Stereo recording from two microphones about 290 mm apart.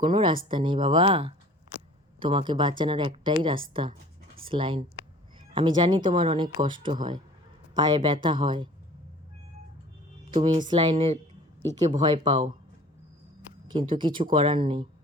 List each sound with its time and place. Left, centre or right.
0.0 s a woman's voice: centre
10.3 s a woman's voice: centre
13.7 s a woman's voice: centre